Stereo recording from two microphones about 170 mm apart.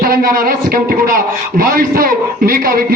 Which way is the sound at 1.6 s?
55° right (ahead or behind).